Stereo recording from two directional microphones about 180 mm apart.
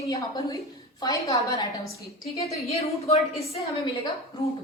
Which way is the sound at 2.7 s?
35° left (ahead or behind).